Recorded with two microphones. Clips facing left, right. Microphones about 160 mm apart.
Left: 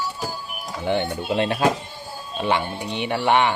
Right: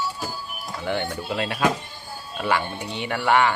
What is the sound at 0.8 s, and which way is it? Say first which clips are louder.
Speech: left 4 dB; 20° left (ahead or behind).